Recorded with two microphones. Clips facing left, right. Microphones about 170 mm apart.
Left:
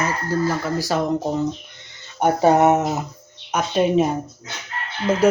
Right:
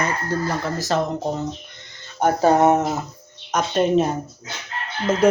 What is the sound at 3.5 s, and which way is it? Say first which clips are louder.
Speech: even; 5° left (ahead or behind).